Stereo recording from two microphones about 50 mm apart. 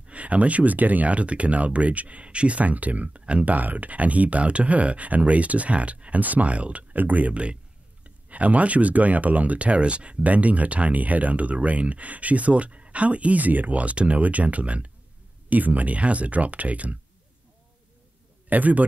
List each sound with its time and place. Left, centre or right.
0.0 s speech: right
18.5 s a man's voice: right